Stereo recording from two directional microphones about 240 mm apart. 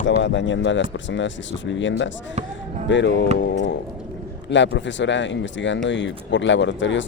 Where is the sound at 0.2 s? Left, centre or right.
Left.